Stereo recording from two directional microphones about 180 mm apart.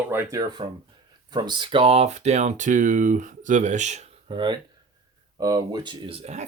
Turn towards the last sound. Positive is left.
turn(degrees=-40)  # may be behind; listen again after turning